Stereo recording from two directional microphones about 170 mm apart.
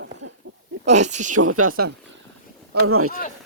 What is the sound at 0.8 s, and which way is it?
Speech, 45° right (ahead or behind).